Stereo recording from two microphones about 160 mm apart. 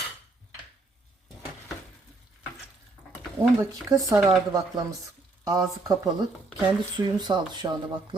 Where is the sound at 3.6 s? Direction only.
20° right (ahead or behind).